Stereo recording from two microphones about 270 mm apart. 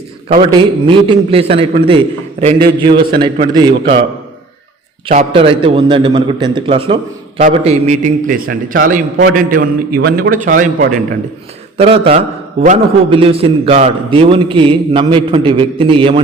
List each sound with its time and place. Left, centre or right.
0.5 s a man's voice: centre
5.0 s a man's voice: centre